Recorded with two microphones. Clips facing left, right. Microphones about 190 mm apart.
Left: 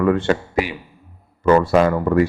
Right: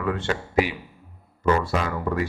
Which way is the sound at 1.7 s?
50° left (ahead or behind).